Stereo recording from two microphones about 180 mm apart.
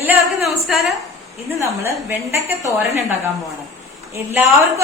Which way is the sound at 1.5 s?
15° right (ahead or behind).